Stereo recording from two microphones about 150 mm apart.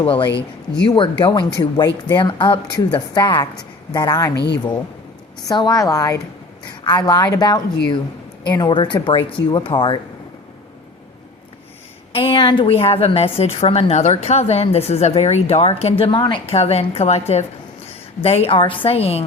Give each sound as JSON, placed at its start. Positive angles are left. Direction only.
{"t": 0.0, "sound": "speech", "side_deg": 35}
{"t": 5.5, "sound": "speech", "side_deg": 25}
{"t": 12.1, "sound": "a woman's voice", "side_deg": 35}